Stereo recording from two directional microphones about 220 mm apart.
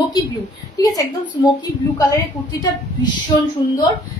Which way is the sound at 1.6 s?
15° left (ahead or behind).